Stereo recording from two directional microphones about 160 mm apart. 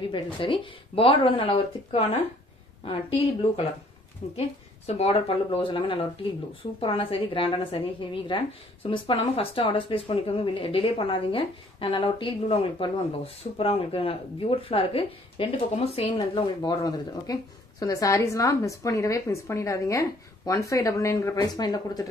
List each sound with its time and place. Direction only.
0.1 s speech: 30° left (ahead or behind)
16.2 s speech: 25° left (ahead or behind)